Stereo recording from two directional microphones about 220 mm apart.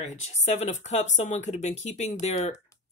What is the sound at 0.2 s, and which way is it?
Speech, 30° left (ahead or behind).